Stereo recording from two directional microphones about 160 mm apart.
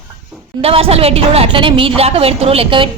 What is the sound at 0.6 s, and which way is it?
A woman's voice, 35° right (ahead or behind).